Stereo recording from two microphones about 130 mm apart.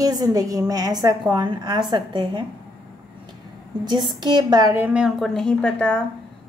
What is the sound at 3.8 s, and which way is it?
A woman's voice, 35° right (ahead or behind).